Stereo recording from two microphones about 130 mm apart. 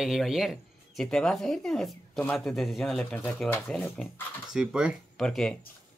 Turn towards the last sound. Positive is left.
turn(degrees=5)  # may be behind; listen again after turning